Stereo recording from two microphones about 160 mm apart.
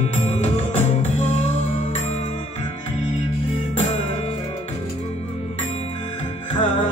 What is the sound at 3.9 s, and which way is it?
Music, 45° left (ahead or behind).